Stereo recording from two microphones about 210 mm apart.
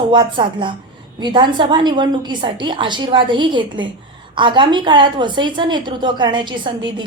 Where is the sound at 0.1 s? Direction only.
20° right (ahead or behind).